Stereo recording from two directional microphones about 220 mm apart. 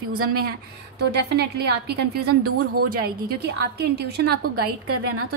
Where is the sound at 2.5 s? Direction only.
90° right.